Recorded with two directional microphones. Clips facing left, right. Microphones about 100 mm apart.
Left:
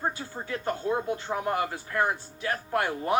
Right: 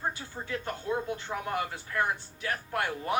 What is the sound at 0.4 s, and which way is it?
Speech, 30° left (ahead or behind).